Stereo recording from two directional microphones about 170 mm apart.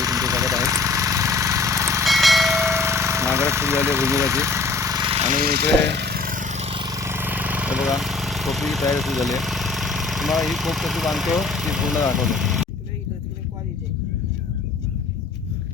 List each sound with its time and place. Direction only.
0.0 s engine: 20° right (ahead or behind)
2.0 s a sound: centre (ahead or behind)
2.5 s vehicle: 15° right (ahead or behind)
5.1 s jackhammer: 40° right (ahead or behind)
5.4 s a sound: 70° right (ahead or behind); by 11.9 s centre (ahead or behind)
12.1 s speech: centre (ahead or behind)